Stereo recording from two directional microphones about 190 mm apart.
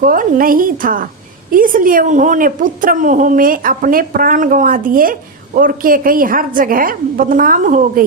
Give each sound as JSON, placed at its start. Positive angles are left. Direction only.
{"t": 0.0, "sound": "a woman's voice", "side_deg": -45}